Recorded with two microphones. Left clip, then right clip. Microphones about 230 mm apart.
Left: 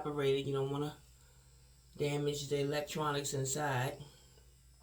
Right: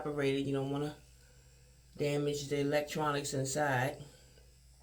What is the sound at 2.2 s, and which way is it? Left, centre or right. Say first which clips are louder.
Speech: right 1 dB; left.